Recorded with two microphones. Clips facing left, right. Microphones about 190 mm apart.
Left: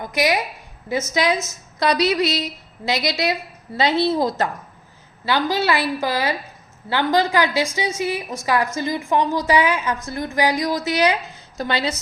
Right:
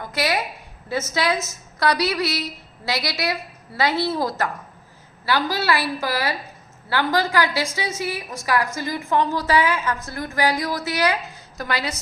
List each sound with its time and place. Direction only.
0.0 s a woman's voice: 15° left (ahead or behind)